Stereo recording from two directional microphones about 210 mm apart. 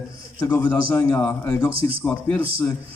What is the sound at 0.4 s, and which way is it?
A man's voice, 10° left (ahead or behind).